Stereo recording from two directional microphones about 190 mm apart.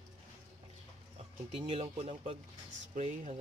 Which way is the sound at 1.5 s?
30° right (ahead or behind).